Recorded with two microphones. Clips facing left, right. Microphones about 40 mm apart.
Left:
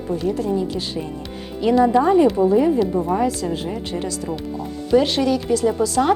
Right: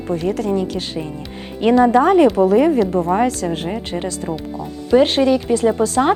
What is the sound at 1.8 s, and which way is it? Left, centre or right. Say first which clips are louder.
Speech: right 3 dB; right.